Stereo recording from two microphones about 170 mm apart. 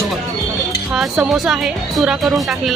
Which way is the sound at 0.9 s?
5° right (ahead or behind).